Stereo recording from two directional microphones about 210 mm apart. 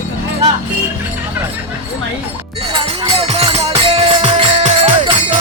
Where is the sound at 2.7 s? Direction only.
25° right (ahead or behind).